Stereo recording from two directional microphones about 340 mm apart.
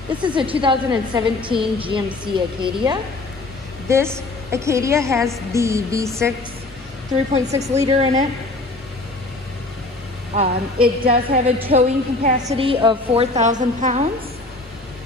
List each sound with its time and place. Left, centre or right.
0.2 s a woman's voice: centre
7.4 s a woman's voice: centre
10.3 s a woman's voice: centre